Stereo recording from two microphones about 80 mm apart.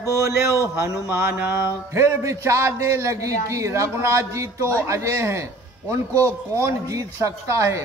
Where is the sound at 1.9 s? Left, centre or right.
Right.